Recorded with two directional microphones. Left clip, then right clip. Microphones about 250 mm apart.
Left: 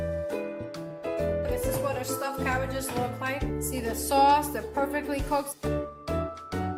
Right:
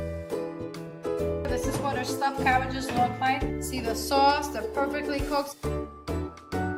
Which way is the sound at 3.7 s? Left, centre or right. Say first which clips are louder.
Even; left.